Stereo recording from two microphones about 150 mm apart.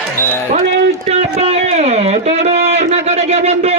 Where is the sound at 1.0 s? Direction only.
45° right (ahead or behind).